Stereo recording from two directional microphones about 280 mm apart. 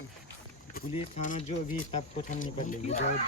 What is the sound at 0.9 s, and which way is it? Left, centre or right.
Speech, left.